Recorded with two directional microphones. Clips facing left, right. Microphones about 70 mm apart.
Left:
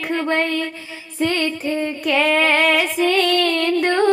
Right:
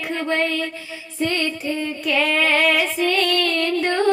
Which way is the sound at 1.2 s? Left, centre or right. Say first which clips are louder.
Left 2 dB; left.